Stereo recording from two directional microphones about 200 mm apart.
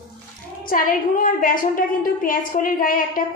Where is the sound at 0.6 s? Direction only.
45° left (ahead or behind).